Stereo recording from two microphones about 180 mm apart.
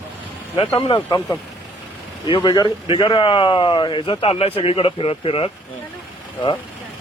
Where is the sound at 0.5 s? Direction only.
30° left (ahead or behind).